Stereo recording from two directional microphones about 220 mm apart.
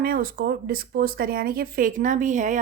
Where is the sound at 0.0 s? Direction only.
40° right (ahead or behind).